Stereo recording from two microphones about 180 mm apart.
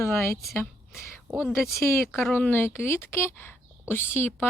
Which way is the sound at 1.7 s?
15° left (ahead or behind).